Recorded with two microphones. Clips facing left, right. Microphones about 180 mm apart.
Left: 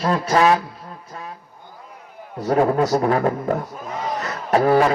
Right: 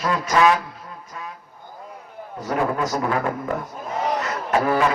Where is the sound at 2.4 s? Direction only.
35° left (ahead or behind).